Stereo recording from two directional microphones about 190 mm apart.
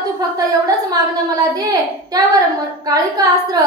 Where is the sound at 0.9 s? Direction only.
20° right (ahead or behind).